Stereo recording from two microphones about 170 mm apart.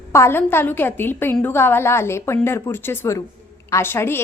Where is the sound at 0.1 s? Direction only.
15° left (ahead or behind).